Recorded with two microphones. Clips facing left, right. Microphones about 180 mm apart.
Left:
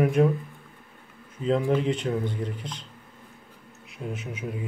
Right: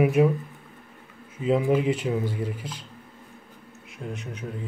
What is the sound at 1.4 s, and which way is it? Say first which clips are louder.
A man's voice: right 2 dB; 5° right (ahead or behind).